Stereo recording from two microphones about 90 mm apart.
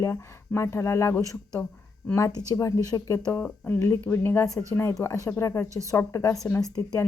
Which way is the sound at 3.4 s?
15° left (ahead or behind).